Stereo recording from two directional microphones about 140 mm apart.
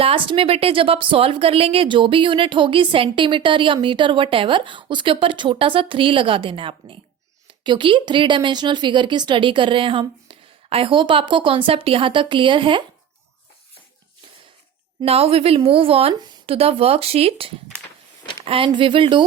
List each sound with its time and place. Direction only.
0.0 s a woman's voice: 40° right (ahead or behind)
15.0 s a woman's voice: 45° right (ahead or behind)